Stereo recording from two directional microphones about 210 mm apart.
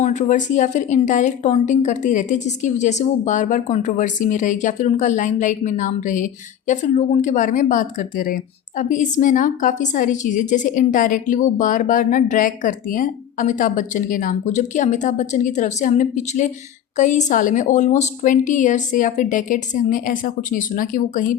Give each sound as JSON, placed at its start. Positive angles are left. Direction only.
{"t": 0.0, "sound": "a woman's voice", "side_deg": 35}